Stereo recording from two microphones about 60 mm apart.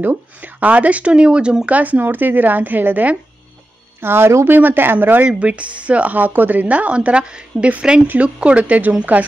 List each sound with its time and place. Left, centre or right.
0.0 s speech: right; by 1.7 s centre
1.7 s speech: right
4.0 s speech: right
4.5 s speech: right